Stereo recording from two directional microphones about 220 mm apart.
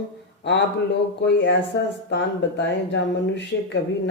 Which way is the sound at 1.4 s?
55° left (ahead or behind).